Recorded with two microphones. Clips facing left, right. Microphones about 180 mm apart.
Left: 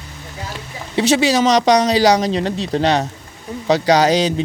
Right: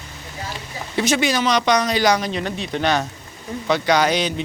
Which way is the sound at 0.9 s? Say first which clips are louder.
Left 5 dB; 35° left (ahead or behind).